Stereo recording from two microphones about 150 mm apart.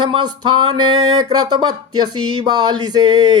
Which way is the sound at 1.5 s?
30° right (ahead or behind).